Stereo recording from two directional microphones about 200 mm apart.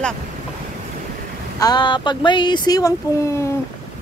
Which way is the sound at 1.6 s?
20° left (ahead or behind).